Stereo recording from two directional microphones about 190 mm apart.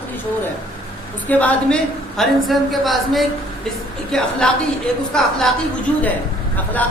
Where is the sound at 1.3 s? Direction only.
10° left (ahead or behind).